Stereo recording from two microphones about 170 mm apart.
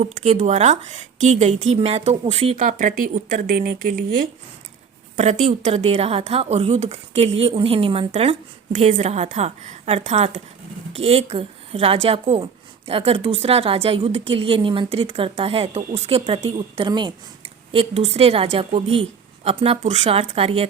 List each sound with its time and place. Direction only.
0.0 s a woman's voice: 45° right (ahead or behind)
5.1 s a woman's voice: 45° right (ahead or behind)